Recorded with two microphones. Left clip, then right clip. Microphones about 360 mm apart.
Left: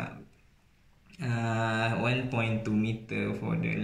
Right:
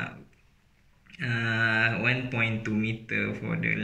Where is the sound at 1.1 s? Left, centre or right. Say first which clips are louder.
Right 5 dB; centre.